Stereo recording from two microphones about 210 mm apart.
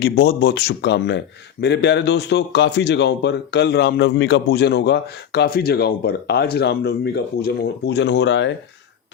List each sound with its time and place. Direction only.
0.0 s a man's voice: 55° left (ahead or behind)